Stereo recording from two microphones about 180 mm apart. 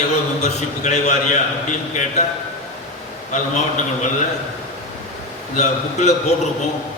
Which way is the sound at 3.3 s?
45° left (ahead or behind).